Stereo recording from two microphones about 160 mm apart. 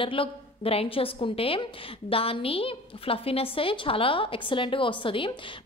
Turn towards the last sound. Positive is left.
turn(degrees=30)  # may be behind; listen again after turning